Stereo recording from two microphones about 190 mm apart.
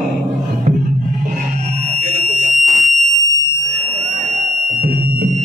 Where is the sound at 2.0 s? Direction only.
40° right (ahead or behind).